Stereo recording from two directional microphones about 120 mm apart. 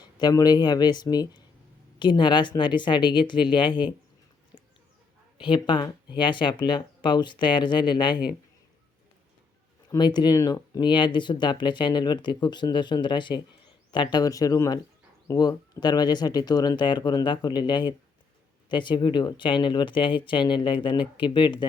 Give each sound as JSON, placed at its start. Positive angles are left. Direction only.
{"t": 0.0, "sound": "speech", "side_deg": 35}
{"t": 5.4, "sound": "speech", "side_deg": 40}
{"t": 10.0, "sound": "speech", "side_deg": 35}